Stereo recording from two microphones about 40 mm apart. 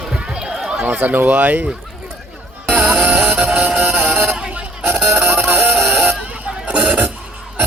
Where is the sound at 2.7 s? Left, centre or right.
Right.